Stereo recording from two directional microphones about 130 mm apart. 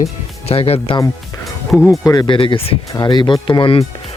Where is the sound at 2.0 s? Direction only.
30° left (ahead or behind).